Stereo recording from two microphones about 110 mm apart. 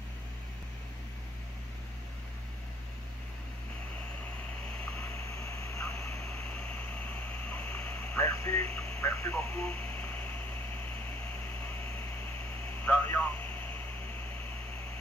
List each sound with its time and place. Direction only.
5.2 s vehicle: 25° left (ahead or behind)
6.5 s a sound: 15° left (ahead or behind)
8.3 s speech: 20° left (ahead or behind)
12.8 s radio: 15° left (ahead or behind)